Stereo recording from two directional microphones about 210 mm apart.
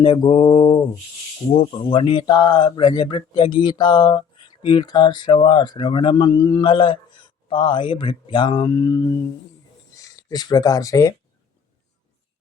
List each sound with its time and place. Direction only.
0.0 s speech: 20° left (ahead or behind)
10.2 s speech: 20° left (ahead or behind)